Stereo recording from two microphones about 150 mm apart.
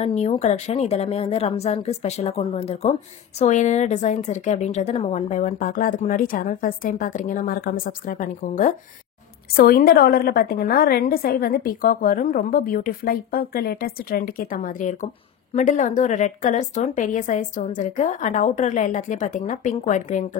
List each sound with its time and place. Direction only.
0.0 s a woman's voice: 45° left (ahead or behind)
9.6 s a woman's voice: 75° left (ahead or behind); by 20.2 s 55° left (ahead or behind)